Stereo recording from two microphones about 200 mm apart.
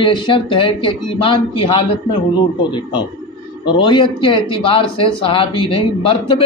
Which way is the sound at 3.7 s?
25° left (ahead or behind).